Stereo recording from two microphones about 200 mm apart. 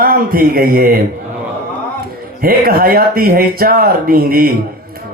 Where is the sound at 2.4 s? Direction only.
45° right (ahead or behind).